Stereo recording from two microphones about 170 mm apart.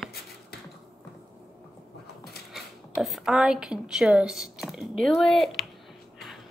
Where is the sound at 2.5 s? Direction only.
Centre (ahead or behind).